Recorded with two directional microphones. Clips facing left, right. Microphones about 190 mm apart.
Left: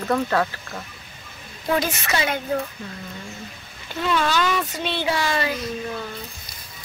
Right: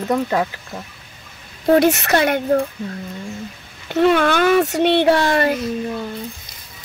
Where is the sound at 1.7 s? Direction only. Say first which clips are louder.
Right 9 dB; 70° right (ahead or behind).